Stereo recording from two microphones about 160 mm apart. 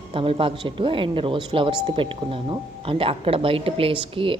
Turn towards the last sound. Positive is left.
turn(degrees=-35)  # may be behind; listen again after turning